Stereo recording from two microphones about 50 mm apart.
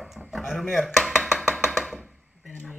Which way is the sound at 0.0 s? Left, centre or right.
Centre.